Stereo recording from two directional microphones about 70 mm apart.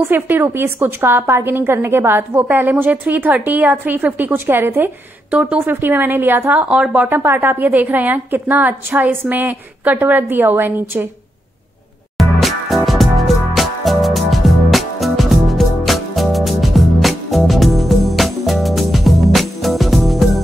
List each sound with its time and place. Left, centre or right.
0.0 s a woman's voice: right
5.3 s speech: centre
5.7 s a woman's voice: right; by 7.1 s centre
7.1 s a woman's voice: right
12.2 s music: centre